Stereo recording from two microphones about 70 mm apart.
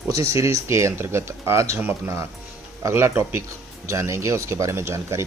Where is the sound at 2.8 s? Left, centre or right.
Right.